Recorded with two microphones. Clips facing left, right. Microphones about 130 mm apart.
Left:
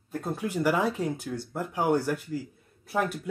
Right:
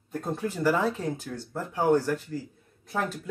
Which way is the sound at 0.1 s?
10° left (ahead or behind).